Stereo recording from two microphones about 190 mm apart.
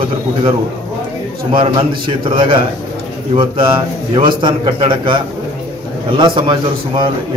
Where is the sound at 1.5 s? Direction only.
25° right (ahead or behind).